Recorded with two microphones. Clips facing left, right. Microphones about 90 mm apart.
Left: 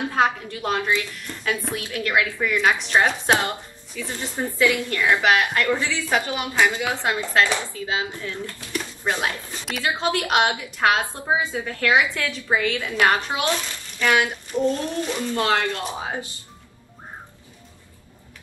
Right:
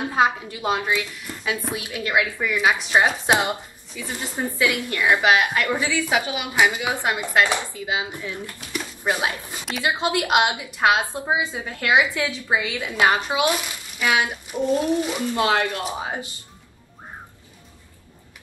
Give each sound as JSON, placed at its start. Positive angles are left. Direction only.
{"t": 0.1, "sound": "a woman's voice", "side_deg": -10}
{"t": 8.7, "sound": "a sound", "side_deg": -10}
{"t": 9.8, "sound": "a woman's voice", "side_deg": -15}